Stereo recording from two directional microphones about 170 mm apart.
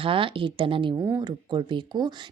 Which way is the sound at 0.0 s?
30° right (ahead or behind).